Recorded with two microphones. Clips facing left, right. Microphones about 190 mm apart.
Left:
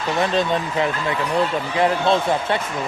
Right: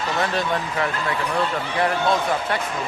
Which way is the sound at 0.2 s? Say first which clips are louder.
Left 4 dB; 20° left (ahead or behind).